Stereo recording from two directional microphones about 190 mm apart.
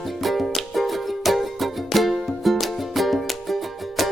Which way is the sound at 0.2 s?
Centre (ahead or behind).